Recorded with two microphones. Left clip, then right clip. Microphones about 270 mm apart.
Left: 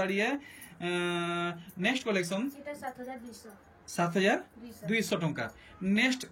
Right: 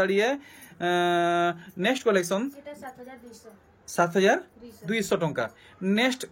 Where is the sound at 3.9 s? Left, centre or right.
Centre.